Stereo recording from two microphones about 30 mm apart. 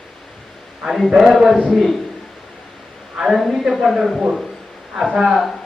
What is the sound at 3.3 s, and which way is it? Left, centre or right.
Speech, centre.